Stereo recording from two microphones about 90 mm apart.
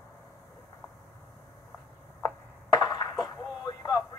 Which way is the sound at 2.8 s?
40° left (ahead or behind).